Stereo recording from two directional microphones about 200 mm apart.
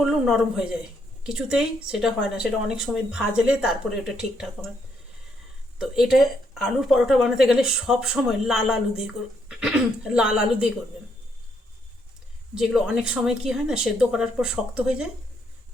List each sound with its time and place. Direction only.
0.0 s speech: centre (ahead or behind)
5.8 s speech: centre (ahead or behind)
12.5 s speech: centre (ahead or behind)